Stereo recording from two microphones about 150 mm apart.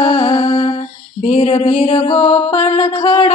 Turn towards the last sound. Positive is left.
turn(degrees=40)  # may be behind; listen again after turning